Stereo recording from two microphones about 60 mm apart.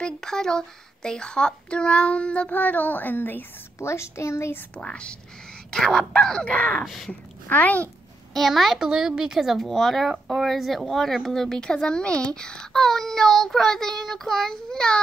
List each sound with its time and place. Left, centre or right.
0.0 s speech: centre; by 3.4 s left
3.8 s a woman's voice: left
4.7 s speech: centre
6.8 s speech: centre
7.4 s speech: left
8.3 s speech: centre